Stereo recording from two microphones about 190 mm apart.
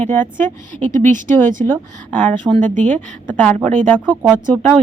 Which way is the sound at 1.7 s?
10° left (ahead or behind).